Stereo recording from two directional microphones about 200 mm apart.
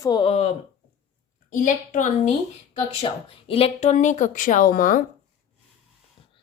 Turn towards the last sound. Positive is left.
turn(degrees=45)  # may be behind; listen again after turning